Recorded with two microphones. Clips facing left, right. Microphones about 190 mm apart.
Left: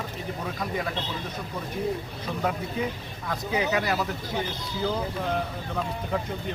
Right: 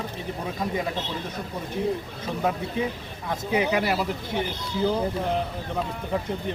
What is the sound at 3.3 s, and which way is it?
Speech, 25° right (ahead or behind).